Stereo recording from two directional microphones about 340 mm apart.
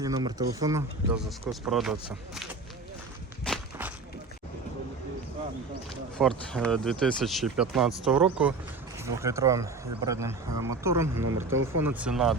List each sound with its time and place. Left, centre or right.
0.0 s speech: centre
3.4 s walk: centre
6.1 s speech: centre